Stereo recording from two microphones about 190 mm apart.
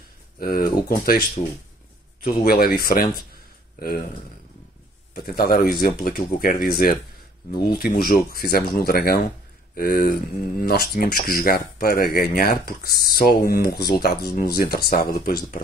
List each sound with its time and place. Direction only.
0.4 s speech: 50° left (ahead or behind)
2.2 s speech: 50° left (ahead or behind)
5.1 s speech: 50° left (ahead or behind)